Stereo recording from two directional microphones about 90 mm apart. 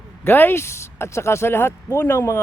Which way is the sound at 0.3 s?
25° left (ahead or behind).